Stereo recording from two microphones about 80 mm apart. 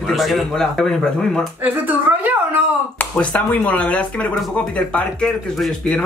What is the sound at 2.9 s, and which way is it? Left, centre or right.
Speech, centre.